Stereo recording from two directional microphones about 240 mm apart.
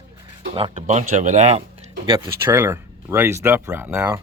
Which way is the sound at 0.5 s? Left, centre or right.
Right.